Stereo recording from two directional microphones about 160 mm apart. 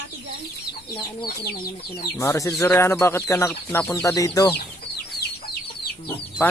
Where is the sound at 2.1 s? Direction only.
20° left (ahead or behind).